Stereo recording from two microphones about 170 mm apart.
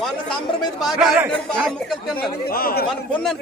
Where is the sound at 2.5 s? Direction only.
60° left (ahead or behind).